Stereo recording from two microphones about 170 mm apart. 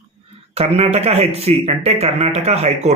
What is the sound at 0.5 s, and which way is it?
Speech, 40° right (ahead or behind).